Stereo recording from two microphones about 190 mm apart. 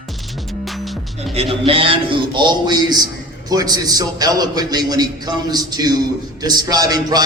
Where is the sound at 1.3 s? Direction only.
30° right (ahead or behind).